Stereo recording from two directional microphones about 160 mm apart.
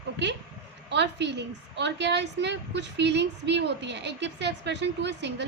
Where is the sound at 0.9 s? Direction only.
90° right.